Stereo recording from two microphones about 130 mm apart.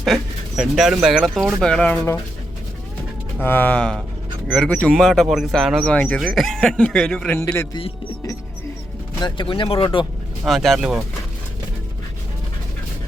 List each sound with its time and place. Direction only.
0.0 s speech: 5° right (ahead or behind)
3.4 s speech: 15° left (ahead or behind); by 5.8 s centre (ahead or behind)
5.8 s speech: 10° left (ahead or behind)
7.7 s speech: 45° left (ahead or behind)
9.2 s speech: 35° left (ahead or behind)
10.4 s speech: centre (ahead or behind)